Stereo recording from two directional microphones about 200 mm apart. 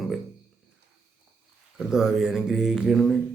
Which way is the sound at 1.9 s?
5° right (ahead or behind).